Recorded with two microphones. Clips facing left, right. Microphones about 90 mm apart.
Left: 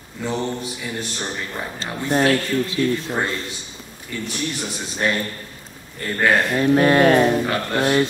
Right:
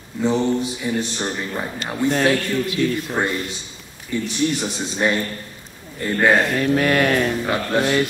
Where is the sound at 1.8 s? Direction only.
20° left (ahead or behind).